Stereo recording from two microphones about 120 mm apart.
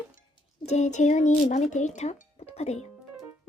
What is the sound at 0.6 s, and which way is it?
Speech, 70° left (ahead or behind).